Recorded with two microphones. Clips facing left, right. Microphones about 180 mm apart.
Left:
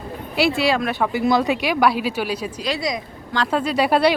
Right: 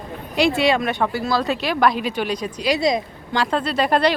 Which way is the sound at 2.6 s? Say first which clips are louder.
Right 6 dB; 25° right (ahead or behind).